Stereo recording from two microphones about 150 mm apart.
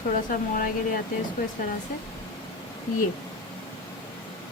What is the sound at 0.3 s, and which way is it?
Speech, 65° left (ahead or behind).